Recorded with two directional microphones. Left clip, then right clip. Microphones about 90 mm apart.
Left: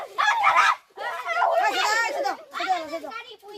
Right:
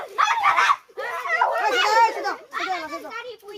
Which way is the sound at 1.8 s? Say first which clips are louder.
Right 5 dB; 40° left (ahead or behind).